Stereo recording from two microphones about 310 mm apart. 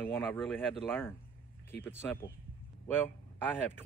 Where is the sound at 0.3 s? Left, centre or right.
Centre.